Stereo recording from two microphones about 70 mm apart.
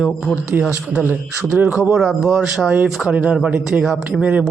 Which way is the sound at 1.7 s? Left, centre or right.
Centre.